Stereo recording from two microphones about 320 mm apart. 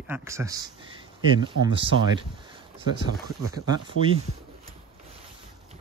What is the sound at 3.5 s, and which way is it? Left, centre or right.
Speech, centre.